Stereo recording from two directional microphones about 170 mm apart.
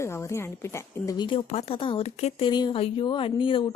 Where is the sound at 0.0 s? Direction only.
15° left (ahead or behind); by 2.5 s 40° left (ahead or behind).